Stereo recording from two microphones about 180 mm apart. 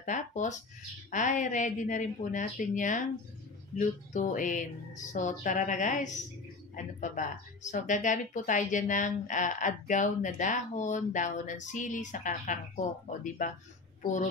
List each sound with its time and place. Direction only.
0.0 s speech: 45° left (ahead or behind)